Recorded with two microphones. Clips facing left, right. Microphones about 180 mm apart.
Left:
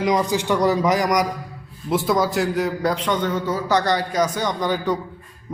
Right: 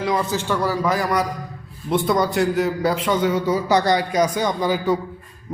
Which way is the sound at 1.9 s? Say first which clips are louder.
Even; centre (ahead or behind).